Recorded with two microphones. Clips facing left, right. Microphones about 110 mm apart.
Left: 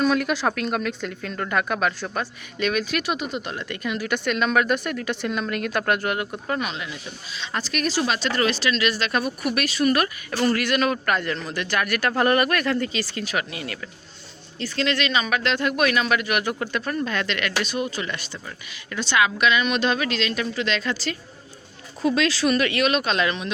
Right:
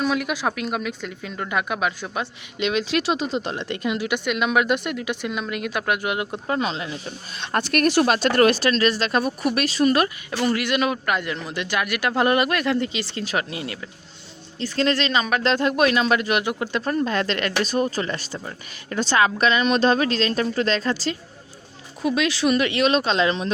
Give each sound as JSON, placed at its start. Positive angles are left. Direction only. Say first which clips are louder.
{"t": 0.0, "sound": "speech", "louder": "left 2 dB", "side_deg": -5}
{"t": 7.3, "sound": "speech", "louder": "right 6 dB", "side_deg": -55}
{"t": 14.6, "sound": "speech", "louder": "right 3 dB", "side_deg": -35}
{"t": 16.8, "sound": "speech", "louder": "right 6 dB", "side_deg": -30}
{"t": 22.0, "sound": "speech", "louder": "even", "side_deg": -15}